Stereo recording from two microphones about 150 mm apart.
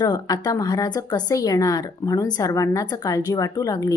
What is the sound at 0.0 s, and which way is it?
Speech, 25° left (ahead or behind).